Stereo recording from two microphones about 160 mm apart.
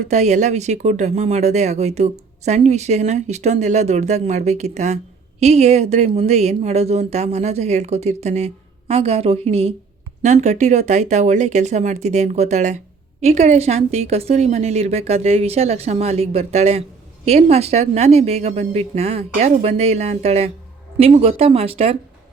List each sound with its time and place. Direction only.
0.1 s a woman's voice: 45° right (ahead or behind)